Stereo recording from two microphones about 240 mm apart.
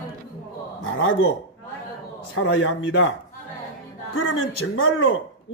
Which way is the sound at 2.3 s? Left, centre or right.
Left.